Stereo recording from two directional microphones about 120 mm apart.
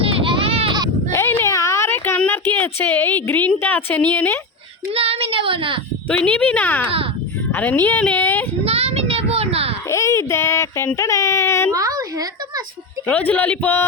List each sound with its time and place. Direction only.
0.0 s goat: 50° right (ahead or behind)
1.1 s a sound: 20° left (ahead or behind)
3.6 s a woman's voice: 20° left (ahead or behind)
4.9 s speech: 55° right (ahead or behind)
6.1 s a woman's voice: 10° left (ahead or behind)
8.6 s a sound: 55° right (ahead or behind)
9.9 s speech: 25° left (ahead or behind)
11.7 s a sound: 30° right (ahead or behind)
13.1 s a woman's voice: 15° left (ahead or behind)